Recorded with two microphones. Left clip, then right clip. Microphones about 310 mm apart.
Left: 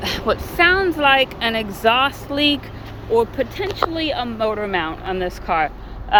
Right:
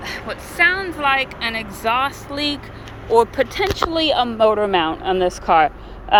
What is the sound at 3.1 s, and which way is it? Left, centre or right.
Speech, centre.